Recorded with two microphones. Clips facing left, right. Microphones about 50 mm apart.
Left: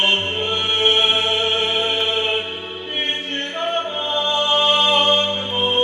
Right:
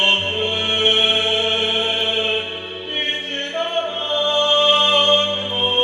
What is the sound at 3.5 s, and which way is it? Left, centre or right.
Music, centre.